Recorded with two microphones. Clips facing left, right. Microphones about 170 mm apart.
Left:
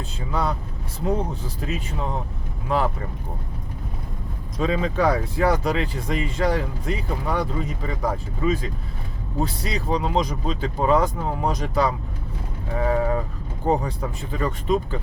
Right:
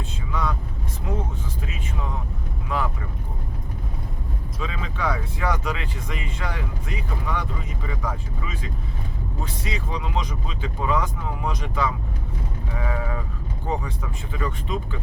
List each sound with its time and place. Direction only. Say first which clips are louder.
0.3 s speech: left 3 dB; 35° left (ahead or behind)
2.7 s speech: left 4 dB; 30° left (ahead or behind)
4.6 s speech: left 8 dB; 40° left (ahead or behind)
12.7 s a sound: left 8 dB; 40° left (ahead or behind)
13.7 s speech: left 7 dB; 40° left (ahead or behind)